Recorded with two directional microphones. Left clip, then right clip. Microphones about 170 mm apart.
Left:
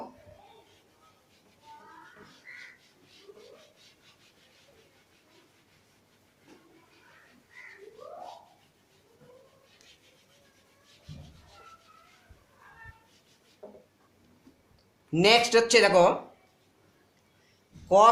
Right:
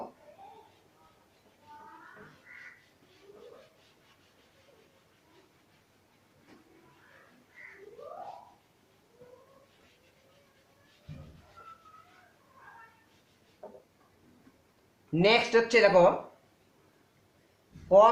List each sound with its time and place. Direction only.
2.5 s crow: 10° right (ahead or behind)
15.1 s speech: 30° left (ahead or behind)
17.8 s a man's voice: 35° left (ahead or behind)